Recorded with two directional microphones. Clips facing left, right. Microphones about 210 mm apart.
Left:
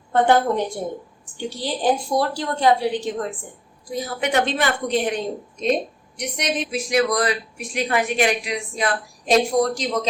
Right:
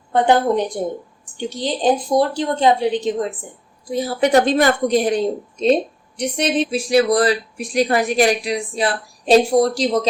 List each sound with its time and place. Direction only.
0.1 s a woman's voice: 20° right (ahead or behind)
3.9 s speech: 30° right (ahead or behind)